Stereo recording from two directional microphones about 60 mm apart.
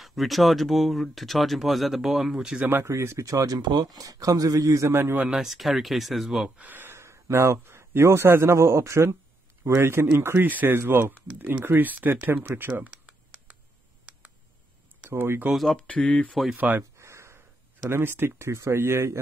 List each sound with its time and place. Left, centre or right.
0.0 s speech: centre
2.8 s speech: right
5.3 s speech: centre
6.6 s speech: right
10.5 s speech: right
15.0 s speech: right
15.7 s speech: centre
16.5 s speech: right
17.0 s a sound: right
17.8 s speech: right